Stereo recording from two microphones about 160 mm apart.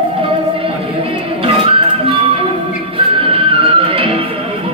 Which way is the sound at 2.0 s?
35° right (ahead or behind).